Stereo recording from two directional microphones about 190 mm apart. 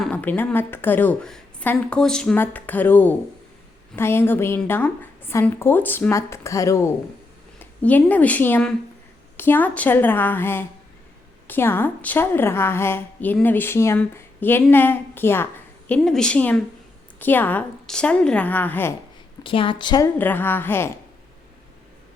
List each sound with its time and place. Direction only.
0.0 s a woman's voice: 5° left (ahead or behind)
19.4 s a woman's voice: 25° left (ahead or behind)
20.1 s a woman's voice: 10° left (ahead or behind)